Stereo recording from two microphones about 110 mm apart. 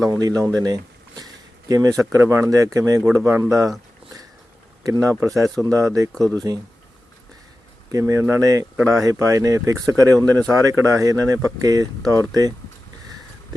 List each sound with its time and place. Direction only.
0.2 s a sound: 35° right (ahead or behind)
2.1 s speech: 25° right (ahead or behind)
4.8 s speech: 30° right (ahead or behind)
6.1 s speech: 5° left (ahead or behind)
7.9 s speech: 30° right (ahead or behind)